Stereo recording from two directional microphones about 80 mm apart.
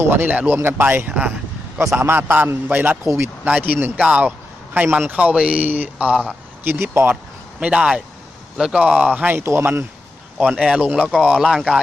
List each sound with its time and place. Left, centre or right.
0.0 s a man's voice: right
3.9 s a man's voice: centre
6.7 s speech: right
7.6 s speech: centre
8.8 s speech: centre
9.3 s speech: right
10.6 s speech: centre